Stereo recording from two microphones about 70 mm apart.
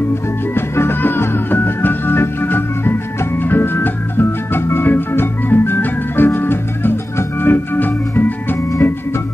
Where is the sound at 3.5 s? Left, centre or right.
Left.